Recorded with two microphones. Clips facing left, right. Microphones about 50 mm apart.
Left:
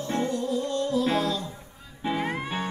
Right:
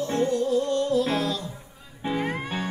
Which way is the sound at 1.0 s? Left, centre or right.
Left.